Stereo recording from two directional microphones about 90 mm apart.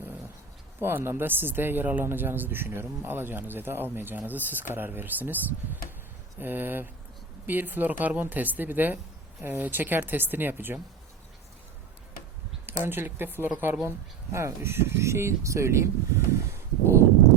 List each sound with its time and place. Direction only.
0.8 s speech: 25° right (ahead or behind)
6.4 s speech: 20° right (ahead or behind)
12.6 s speech: 25° right (ahead or behind)